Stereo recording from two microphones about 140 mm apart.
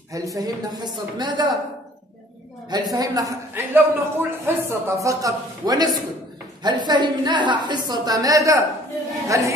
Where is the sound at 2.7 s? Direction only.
25° right (ahead or behind).